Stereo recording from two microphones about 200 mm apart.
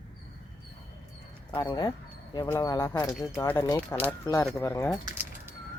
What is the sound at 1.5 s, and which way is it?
Speech, 20° left (ahead or behind).